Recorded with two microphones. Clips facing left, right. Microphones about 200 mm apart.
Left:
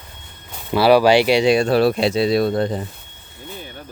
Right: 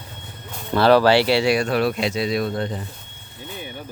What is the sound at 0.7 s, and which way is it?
Speech, 10° left (ahead or behind).